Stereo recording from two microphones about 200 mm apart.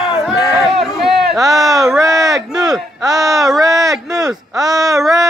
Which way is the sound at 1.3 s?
15° right (ahead or behind).